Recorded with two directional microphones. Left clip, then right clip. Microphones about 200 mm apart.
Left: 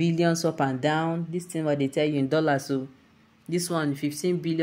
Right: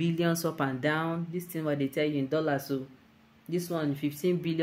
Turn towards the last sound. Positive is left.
turn(degrees=10)  # may be behind; listen again after turning